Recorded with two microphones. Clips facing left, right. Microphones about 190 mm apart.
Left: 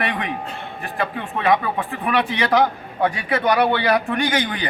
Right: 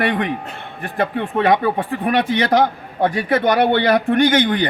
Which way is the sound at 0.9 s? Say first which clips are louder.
Right 7 dB; 50° right (ahead or behind).